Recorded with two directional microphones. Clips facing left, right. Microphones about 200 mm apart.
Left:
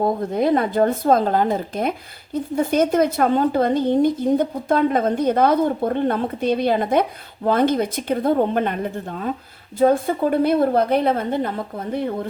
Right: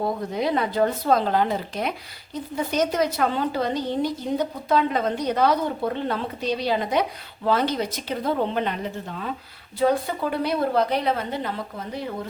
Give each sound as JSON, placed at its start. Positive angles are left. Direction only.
{"t": 0.0, "sound": "speech", "side_deg": 50}